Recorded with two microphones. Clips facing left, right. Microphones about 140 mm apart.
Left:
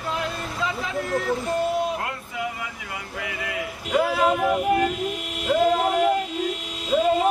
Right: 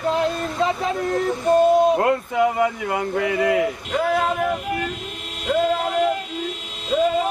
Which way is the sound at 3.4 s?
30° right (ahead or behind).